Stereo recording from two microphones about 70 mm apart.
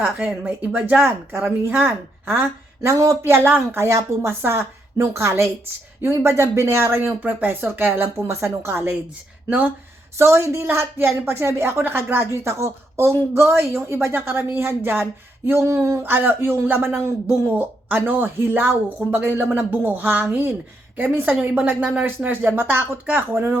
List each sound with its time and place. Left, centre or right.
0.0 s a woman's voice: right
10.2 s a woman's voice: right
15.4 s a sound: right
16.0 s speech: right